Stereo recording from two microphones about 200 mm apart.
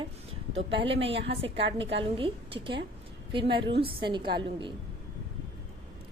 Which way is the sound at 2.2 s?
25° right (ahead or behind).